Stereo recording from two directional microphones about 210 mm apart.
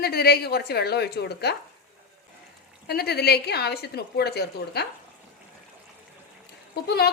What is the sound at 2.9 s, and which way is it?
A woman's voice, 50° left (ahead or behind).